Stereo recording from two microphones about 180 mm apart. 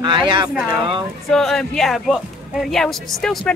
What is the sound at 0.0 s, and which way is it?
Speech, 25° right (ahead or behind).